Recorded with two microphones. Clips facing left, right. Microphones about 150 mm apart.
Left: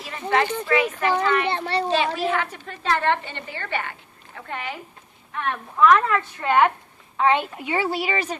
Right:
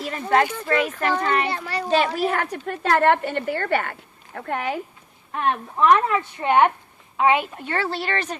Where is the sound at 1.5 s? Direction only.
30° left (ahead or behind).